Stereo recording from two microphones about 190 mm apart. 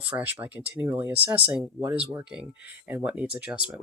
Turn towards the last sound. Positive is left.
turn(degrees=-5)  # may be behind; listen again after turning